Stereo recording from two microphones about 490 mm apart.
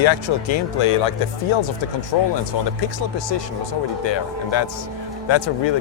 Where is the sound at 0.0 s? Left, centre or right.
Left.